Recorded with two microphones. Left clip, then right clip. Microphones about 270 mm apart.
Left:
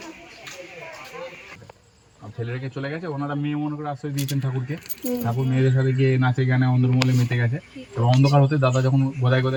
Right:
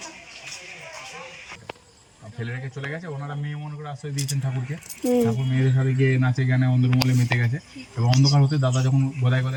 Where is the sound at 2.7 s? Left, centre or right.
Left.